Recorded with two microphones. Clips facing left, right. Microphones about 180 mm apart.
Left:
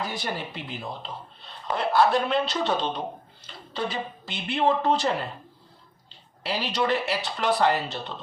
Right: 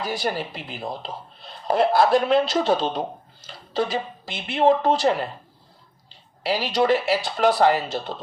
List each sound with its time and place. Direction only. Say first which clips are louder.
0.0 s speech: right 5 dB; 35° right (ahead or behind)
6.4 s speech: right 5 dB; 40° right (ahead or behind)